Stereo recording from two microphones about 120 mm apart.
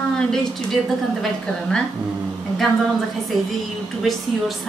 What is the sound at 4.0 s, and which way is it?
Speech, centre (ahead or behind).